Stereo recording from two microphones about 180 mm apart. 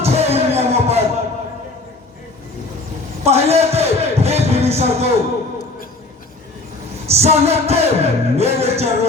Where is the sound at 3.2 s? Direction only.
35° right (ahead or behind).